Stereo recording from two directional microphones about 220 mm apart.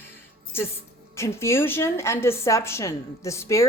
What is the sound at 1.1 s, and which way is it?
A woman's voice, 10° left (ahead or behind).